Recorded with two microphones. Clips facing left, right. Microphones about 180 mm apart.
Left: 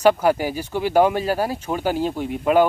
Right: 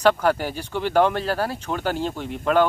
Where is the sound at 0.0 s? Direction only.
10° left (ahead or behind).